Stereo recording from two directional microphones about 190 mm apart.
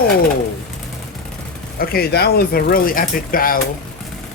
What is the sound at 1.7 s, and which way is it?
Speech, 55° left (ahead or behind).